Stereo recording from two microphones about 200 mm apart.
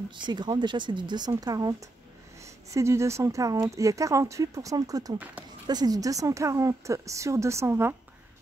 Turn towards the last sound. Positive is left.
turn(degrees=-10)  # may be behind; listen again after turning